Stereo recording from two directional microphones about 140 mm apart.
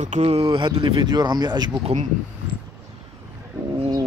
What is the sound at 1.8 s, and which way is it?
Speech, 50° right (ahead or behind).